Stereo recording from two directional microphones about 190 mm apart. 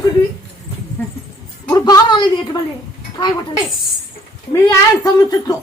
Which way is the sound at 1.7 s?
20° left (ahead or behind).